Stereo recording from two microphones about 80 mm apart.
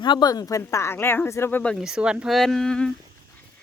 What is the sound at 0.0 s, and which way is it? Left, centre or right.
Speech, left.